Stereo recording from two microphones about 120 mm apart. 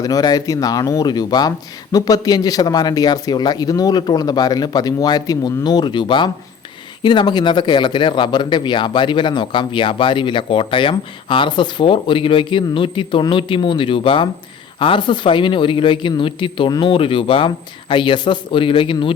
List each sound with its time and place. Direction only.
0.0 s a man's voice: 30° left (ahead or behind)